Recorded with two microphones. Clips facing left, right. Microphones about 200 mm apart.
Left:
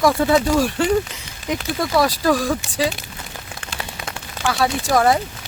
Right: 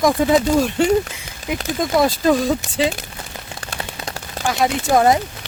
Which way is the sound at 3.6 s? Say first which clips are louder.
Right 2 dB; 35° right (ahead or behind).